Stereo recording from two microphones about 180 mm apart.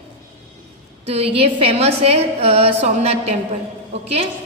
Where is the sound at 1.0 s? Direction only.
35° right (ahead or behind).